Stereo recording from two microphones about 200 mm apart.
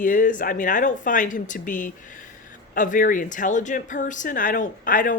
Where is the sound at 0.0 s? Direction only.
40° left (ahead or behind).